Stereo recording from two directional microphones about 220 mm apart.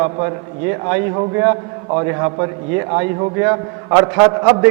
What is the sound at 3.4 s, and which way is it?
A man's voice, 20° right (ahead or behind).